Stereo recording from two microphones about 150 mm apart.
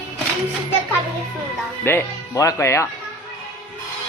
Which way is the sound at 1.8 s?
20° left (ahead or behind).